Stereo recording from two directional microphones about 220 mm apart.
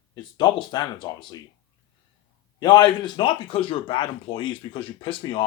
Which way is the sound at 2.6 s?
20° left (ahead or behind).